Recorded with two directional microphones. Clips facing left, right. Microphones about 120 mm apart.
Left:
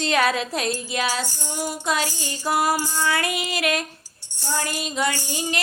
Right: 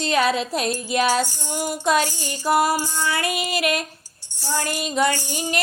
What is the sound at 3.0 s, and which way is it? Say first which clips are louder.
Speech: left 2 dB; 25° right (ahead or behind).